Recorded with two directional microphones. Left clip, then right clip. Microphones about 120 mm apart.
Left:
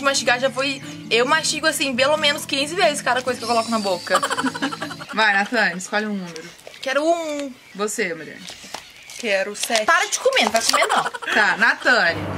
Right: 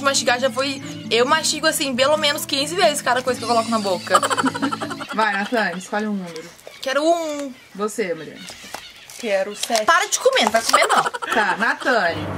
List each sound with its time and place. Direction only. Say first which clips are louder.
0.0 s speech: even; 10° right (ahead or behind)
4.6 s music: right 2 dB; centre (ahead or behind)
5.1 s speech: left 2 dB; 45° left (ahead or behind)
6.8 s speech: right 1 dB; 10° right (ahead or behind)
7.8 s speech: even; 45° left (ahead or behind)
9.2 s speech: even; 10° left (ahead or behind)
9.8 s speech: right 1 dB; 10° right (ahead or behind)
10.5 s speech: right 2 dB; centre (ahead or behind)
11.6 s speech: left 2 dB; 45° left (ahead or behind)